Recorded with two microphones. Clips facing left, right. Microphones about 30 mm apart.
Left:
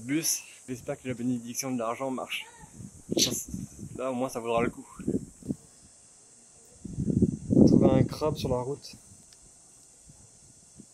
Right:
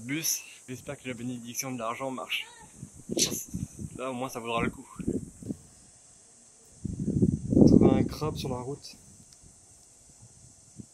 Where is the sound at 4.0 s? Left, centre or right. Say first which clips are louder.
Left 3 dB; centre.